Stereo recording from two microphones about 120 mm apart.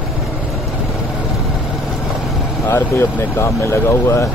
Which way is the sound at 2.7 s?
20° left (ahead or behind).